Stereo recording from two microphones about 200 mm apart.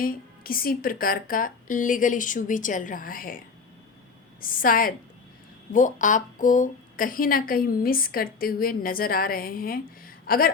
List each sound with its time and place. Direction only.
0.0 s a woman's voice: 45° left (ahead or behind)